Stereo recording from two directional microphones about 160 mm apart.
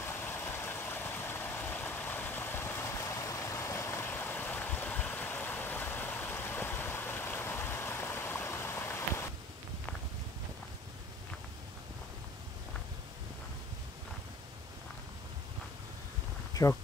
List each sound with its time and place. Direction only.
0.0 s vehicle: 15° left (ahead or behind)
16.6 s speech: 25° left (ahead or behind)